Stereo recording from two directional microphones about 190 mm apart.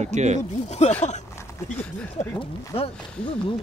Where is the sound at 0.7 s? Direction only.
35° left (ahead or behind).